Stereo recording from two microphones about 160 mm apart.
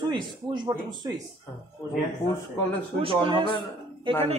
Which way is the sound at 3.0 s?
35° right (ahead or behind).